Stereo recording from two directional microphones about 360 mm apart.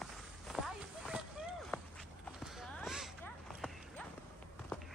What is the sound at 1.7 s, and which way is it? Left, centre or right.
Walk, centre.